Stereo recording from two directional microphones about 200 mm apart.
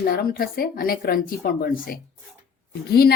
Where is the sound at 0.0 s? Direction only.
50° left (ahead or behind).